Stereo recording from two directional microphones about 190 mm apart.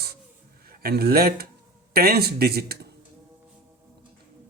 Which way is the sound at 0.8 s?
55° right (ahead or behind).